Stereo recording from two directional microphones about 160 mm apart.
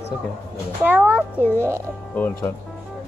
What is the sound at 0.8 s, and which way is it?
A child's voice, 10° right (ahead or behind).